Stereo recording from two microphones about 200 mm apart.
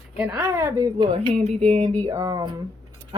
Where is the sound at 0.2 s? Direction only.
5° right (ahead or behind).